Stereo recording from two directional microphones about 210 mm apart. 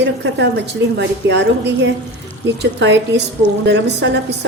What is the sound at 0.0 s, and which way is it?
A woman's voice, 55° right (ahead or behind).